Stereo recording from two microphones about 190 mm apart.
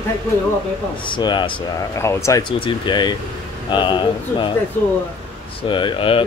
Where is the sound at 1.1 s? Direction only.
25° left (ahead or behind).